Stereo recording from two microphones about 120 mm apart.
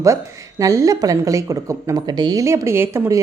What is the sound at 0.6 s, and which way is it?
A woman's voice, 30° right (ahead or behind).